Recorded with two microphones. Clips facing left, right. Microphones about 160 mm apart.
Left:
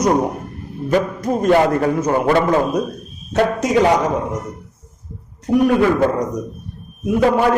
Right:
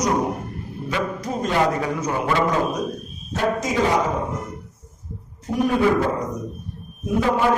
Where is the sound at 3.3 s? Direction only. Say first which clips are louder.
Left 6 dB; 70° left (ahead or behind).